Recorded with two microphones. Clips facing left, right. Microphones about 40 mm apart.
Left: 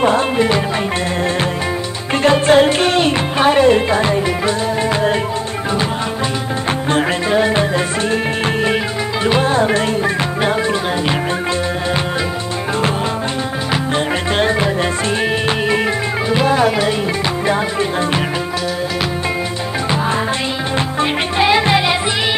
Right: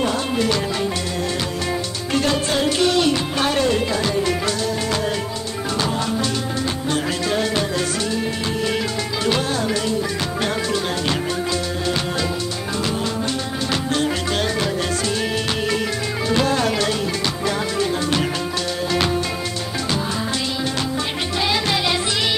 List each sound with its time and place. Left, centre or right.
0.0 s music: left
2.1 s music: left
7.2 s music: left
9.2 s music: left
13.9 s music: left
16.3 s music: centre
21.0 s music: left